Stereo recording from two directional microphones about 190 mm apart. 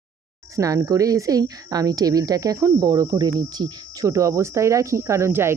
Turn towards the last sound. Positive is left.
turn(degrees=-15)  # may be behind; listen again after turning